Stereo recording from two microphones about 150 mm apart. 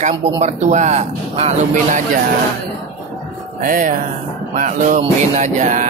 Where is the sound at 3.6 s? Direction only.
65° right (ahead or behind).